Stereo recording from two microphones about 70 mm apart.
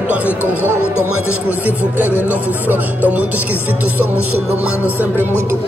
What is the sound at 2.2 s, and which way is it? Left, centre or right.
Speech, right.